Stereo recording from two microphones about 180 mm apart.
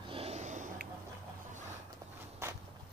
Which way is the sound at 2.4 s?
15° right (ahead or behind).